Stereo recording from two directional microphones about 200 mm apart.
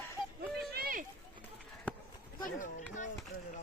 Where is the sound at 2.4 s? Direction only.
40° left (ahead or behind).